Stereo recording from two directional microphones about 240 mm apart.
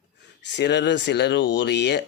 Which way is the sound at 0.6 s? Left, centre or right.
Left.